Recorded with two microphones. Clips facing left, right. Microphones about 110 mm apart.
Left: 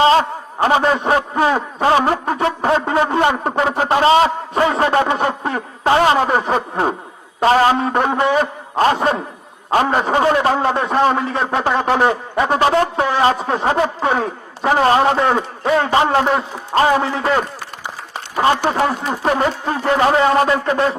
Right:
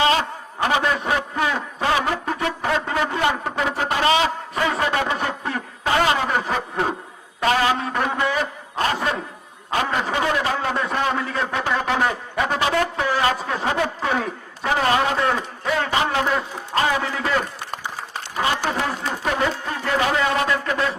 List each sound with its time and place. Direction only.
0.0 s a man's voice: 35° left (ahead or behind)
18.3 s a man's voice: 45° left (ahead or behind)
18.7 s a man's voice: 35° left (ahead or behind)